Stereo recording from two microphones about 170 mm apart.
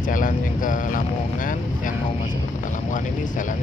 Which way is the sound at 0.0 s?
50° left (ahead or behind).